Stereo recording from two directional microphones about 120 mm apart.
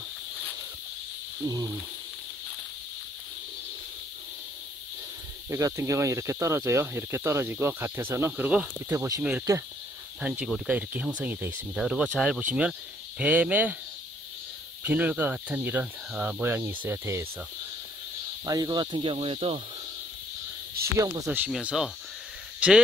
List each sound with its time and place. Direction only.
1.4 s speech: 25° right (ahead or behind)
5.5 s speech: 25° right (ahead or behind)
8.9 s speech: 25° right (ahead or behind)
10.2 s speech: 10° right (ahead or behind)
14.8 s speech: 10° right (ahead or behind)
18.4 s speech: 35° right (ahead or behind); by 19.6 s 55° right (ahead or behind)
21.0 s speech: 15° right (ahead or behind)
21.5 s speech: 5° right (ahead or behind)